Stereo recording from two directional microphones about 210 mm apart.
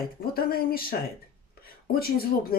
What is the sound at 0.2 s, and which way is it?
Speech, 45° left (ahead or behind).